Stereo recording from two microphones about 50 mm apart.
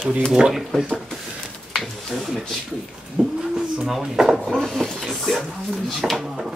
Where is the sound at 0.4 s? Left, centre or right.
Centre.